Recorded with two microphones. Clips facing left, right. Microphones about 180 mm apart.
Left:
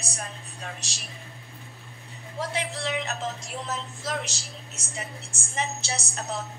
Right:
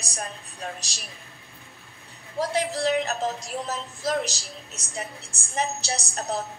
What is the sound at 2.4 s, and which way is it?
A woman's voice, 40° right (ahead or behind).